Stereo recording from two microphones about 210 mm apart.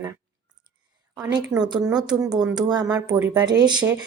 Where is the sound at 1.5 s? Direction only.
15° right (ahead or behind).